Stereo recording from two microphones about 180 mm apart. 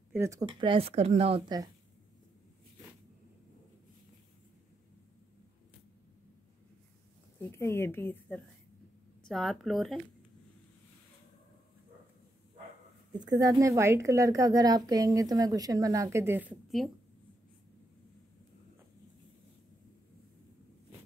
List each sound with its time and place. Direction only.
0.1 s speech: 15° right (ahead or behind)
0.5 s speech: 25° right (ahead or behind)
7.3 s a woman's voice: 15° left (ahead or behind)
9.2 s speech: centre (ahead or behind)
13.4 s a woman's voice: 20° right (ahead or behind); by 16.9 s centre (ahead or behind)